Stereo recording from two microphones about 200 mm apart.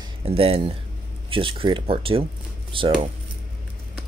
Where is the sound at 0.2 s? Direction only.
30° right (ahead or behind).